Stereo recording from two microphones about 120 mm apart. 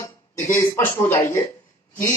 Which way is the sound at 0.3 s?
90° left.